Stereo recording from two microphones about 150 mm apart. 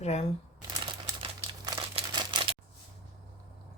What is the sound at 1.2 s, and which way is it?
Crumpling, 35° right (ahead or behind).